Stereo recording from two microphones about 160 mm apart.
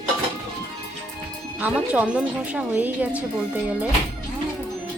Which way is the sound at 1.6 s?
10° right (ahead or behind).